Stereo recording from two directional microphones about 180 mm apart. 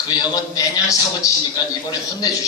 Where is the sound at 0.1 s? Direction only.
20° left (ahead or behind).